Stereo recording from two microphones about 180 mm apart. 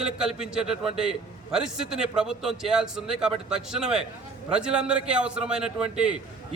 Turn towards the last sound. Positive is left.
turn(degrees=-5)  # may be behind; listen again after turning